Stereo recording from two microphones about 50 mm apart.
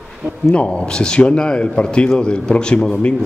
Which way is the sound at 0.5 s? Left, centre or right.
Centre.